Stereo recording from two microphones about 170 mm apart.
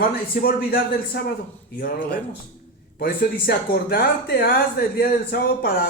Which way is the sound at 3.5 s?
60° left (ahead or behind).